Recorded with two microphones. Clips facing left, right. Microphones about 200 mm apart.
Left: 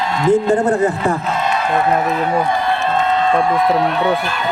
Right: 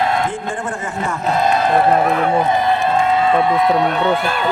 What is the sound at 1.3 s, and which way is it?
Speech, 35° right (ahead or behind).